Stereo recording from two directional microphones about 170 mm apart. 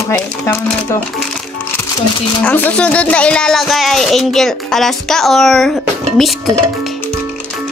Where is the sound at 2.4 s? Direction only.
10° left (ahead or behind).